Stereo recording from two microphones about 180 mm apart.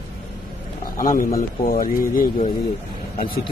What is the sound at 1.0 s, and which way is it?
Speech, 50° left (ahead or behind).